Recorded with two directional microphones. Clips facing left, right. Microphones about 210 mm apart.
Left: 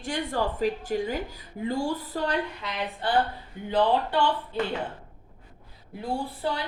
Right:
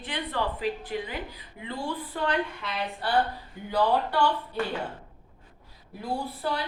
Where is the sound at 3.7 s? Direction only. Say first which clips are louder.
Left 1 dB; 20° left (ahead or behind).